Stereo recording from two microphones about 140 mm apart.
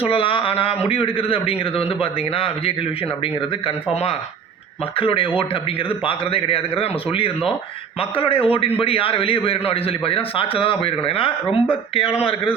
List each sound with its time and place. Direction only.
0.0 s a man's voice: 40° left (ahead or behind)
11.4 s speech: 10° left (ahead or behind)
11.9 s a man's voice: 40° left (ahead or behind)